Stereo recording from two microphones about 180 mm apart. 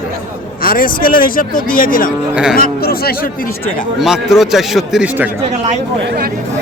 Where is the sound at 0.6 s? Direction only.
50° left (ahead or behind).